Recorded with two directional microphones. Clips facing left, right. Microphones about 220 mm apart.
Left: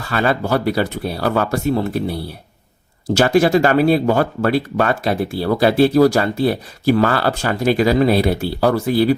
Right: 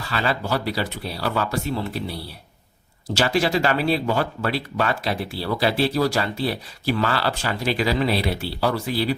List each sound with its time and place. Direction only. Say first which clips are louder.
0.0 s speech: left 6 dB; 50° left (ahead or behind)